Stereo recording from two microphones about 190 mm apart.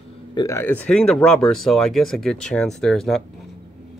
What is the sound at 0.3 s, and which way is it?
Speech, 20° left (ahead or behind).